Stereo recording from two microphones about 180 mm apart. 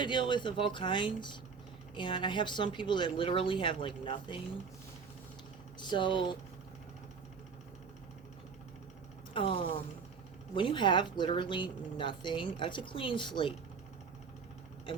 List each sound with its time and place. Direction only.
0.0 s speech: 25° left (ahead or behind)
5.8 s speech: 25° left (ahead or behind)
9.3 s speech: 30° left (ahead or behind)